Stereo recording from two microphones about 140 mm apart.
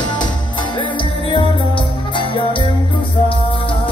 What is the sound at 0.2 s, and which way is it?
Music, 35° left (ahead or behind).